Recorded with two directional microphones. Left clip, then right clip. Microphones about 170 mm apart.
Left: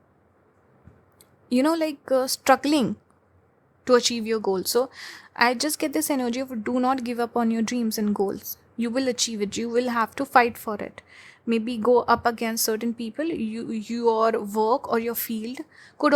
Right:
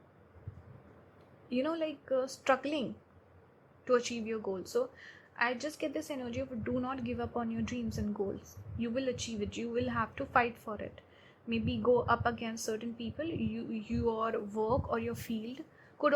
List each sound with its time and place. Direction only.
1.5 s speech: 55° left (ahead or behind)
3.8 s speech: 55° left (ahead or behind)